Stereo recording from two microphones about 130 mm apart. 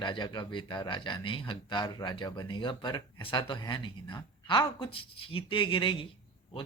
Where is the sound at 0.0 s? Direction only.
35° left (ahead or behind).